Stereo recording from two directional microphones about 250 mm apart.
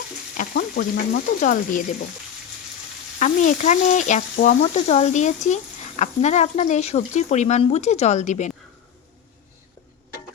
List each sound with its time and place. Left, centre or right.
0.3 s frying: left
3.2 s speech: left